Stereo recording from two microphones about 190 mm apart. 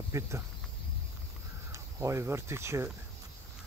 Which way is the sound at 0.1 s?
15° right (ahead or behind).